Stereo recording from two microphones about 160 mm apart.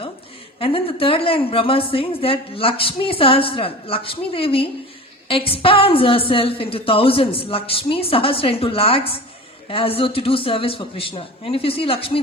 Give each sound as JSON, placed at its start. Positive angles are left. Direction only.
{"t": 0.6, "sound": "a woman's voice", "side_deg": 35}